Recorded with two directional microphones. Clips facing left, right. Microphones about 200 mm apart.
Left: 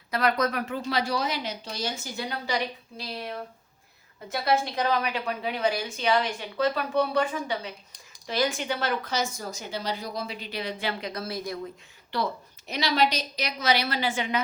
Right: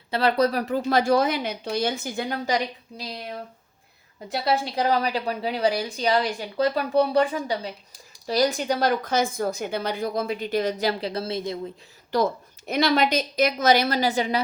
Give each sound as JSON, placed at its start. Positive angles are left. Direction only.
{"t": 0.1, "sound": "speech", "side_deg": -30}
{"t": 0.8, "sound": "a woman's voice", "side_deg": -50}
{"t": 4.7, "sound": "speech", "side_deg": -35}
{"t": 12.1, "sound": "a woman's voice", "side_deg": -50}